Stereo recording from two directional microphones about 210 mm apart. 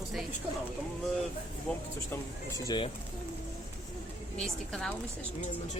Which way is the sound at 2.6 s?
20° left (ahead or behind).